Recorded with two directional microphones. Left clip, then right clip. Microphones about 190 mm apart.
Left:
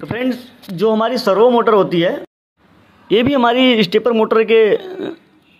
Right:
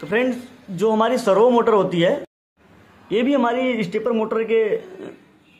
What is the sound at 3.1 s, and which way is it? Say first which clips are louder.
A man's voice: left 6 dB; 35° left (ahead or behind).